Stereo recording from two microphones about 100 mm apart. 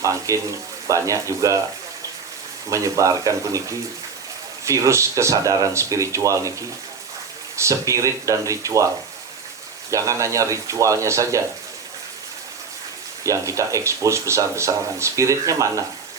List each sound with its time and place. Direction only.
0.0 s speech: 35° right (ahead or behind)
2.6 s speech: 30° right (ahead or behind)
9.9 s speech: 30° right (ahead or behind)
13.2 s speech: 30° right (ahead or behind)